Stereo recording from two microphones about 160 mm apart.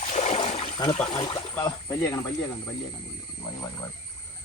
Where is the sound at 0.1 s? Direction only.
45° left (ahead or behind).